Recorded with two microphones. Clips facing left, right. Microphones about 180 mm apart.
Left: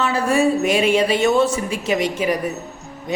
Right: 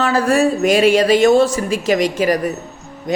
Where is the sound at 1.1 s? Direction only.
35° right (ahead or behind).